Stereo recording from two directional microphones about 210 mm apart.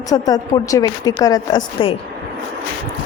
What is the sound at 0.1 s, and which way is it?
A woman's voice, 15° left (ahead or behind).